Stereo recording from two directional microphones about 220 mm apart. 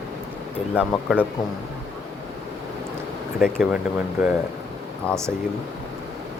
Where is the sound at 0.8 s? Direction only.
5° right (ahead or behind).